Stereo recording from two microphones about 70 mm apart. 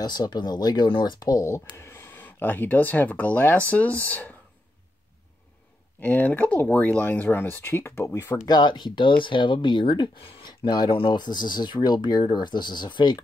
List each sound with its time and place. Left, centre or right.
0.0 s speech: left
1.8 s speech: left
5.9 s speech: left
8.5 s speech: left